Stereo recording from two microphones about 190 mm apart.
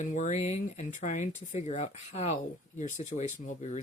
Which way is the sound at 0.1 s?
40° left (ahead or behind).